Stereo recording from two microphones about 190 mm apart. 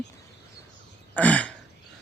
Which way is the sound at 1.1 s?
5° left (ahead or behind).